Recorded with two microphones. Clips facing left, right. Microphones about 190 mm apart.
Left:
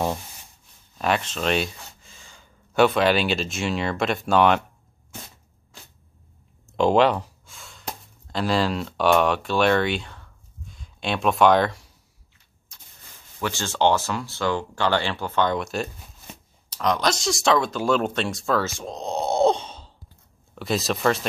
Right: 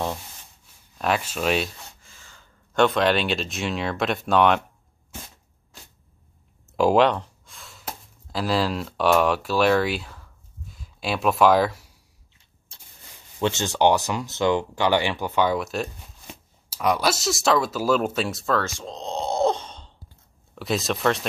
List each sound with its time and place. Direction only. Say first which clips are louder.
0.9 s speech: even; centre (ahead or behind)
2.0 s speech: left 2 dB; 15° left (ahead or behind); by 4.6 s centre (ahead or behind)
6.8 s a sound: even; centre (ahead or behind)
12.7 s a sound: even; 30° right (ahead or behind)
13.4 s speech: right 2 dB; 20° right (ahead or behind); by 18.7 s centre (ahead or behind)
18.8 s groan: left 2 dB; 10° left (ahead or behind)
20.5 s speech: even; centre (ahead or behind)